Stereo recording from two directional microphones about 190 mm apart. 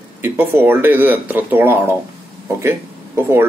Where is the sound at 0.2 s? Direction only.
10° right (ahead or behind).